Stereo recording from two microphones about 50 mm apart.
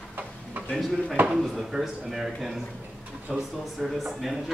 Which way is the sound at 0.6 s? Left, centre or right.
Right.